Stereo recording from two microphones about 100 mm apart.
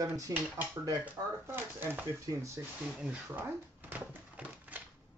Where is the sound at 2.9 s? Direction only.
10° right (ahead or behind).